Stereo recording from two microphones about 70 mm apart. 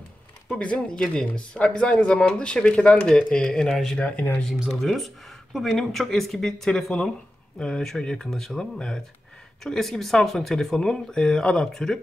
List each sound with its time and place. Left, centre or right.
0.5 s speech: centre
4.0 s speech: left
4.8 s speech: centre